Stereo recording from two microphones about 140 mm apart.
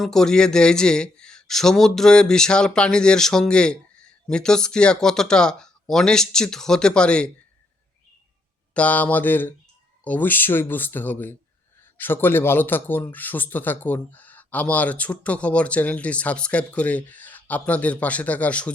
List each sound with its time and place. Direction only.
0.0 s speech: 5° left (ahead or behind)
8.7 s a man's voice: 10° left (ahead or behind)